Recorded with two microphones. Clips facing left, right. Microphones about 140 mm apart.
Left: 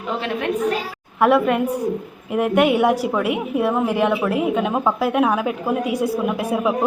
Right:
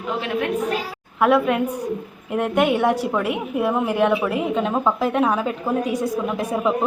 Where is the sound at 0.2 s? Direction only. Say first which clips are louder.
Left 1 dB; centre (ahead or behind).